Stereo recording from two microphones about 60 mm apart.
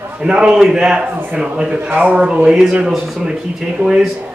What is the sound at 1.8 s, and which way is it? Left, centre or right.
Speech, right.